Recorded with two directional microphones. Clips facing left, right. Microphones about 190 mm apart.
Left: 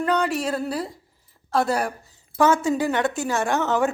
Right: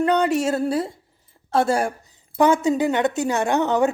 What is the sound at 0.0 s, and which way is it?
A woman's voice, 20° right (ahead or behind).